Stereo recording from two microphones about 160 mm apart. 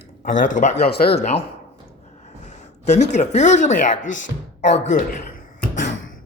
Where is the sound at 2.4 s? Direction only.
45° left (ahead or behind).